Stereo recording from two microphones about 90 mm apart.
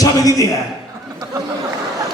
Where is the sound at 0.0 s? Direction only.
40° left (ahead or behind).